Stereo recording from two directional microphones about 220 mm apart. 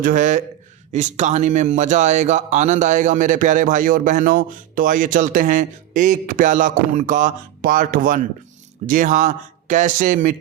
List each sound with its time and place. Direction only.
0.0 s speech: 35° right (ahead or behind)